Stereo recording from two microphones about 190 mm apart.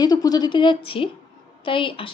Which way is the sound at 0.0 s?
20° left (ahead or behind).